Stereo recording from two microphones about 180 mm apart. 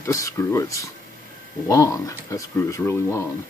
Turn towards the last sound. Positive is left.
turn(degrees=15)  # may be behind; listen again after turning